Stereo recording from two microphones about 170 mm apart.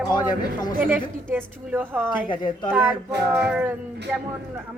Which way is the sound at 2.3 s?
25° left (ahead or behind).